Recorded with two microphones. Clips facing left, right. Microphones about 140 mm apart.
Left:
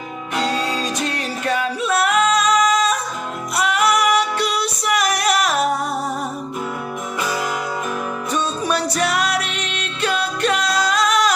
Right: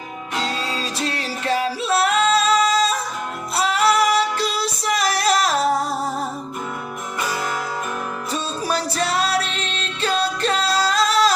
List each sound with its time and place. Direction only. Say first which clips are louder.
0.7 s music: left 3 dB; 30° right (ahead or behind)
8.3 s music: left 3 dB; 30° right (ahead or behind)